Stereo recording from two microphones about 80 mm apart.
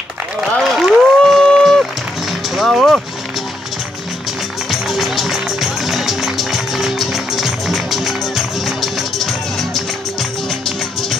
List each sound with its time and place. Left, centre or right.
0.6 s a sound: centre
2.2 s music: centre
4.6 s music: centre